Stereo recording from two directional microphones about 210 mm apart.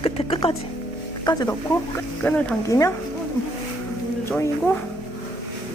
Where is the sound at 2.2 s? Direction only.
5° left (ahead or behind).